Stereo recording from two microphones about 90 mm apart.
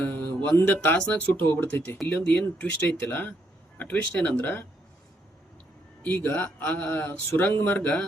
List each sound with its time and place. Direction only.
0.0 s mantra: 20° left (ahead or behind)
0.5 s speech: 20° left (ahead or behind)
6.0 s speech: 20° left (ahead or behind)